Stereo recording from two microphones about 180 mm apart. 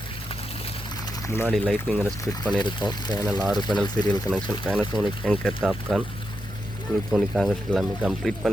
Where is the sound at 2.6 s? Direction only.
25° left (ahead or behind).